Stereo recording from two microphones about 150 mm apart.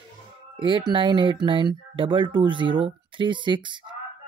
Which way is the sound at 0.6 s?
35° right (ahead or behind).